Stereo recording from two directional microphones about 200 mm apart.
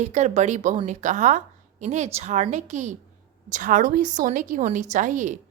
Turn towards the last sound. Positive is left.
turn(degrees=-40)  # may be behind; listen again after turning